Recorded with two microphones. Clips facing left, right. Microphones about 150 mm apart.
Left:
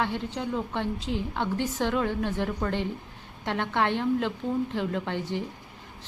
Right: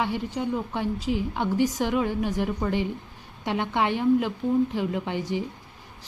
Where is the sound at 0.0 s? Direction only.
10° right (ahead or behind).